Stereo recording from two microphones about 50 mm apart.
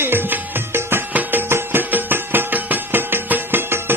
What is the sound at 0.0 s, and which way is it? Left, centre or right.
Music, right.